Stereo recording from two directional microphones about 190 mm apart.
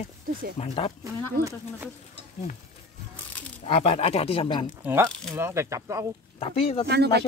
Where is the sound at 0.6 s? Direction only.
30° left (ahead or behind).